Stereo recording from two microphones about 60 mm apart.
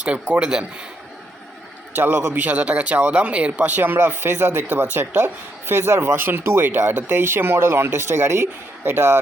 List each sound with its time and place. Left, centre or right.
0.0 s a man's voice: centre
2.0 s speech: right